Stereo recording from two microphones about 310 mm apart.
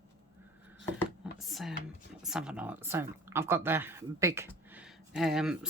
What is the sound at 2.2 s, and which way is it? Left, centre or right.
Speech, centre.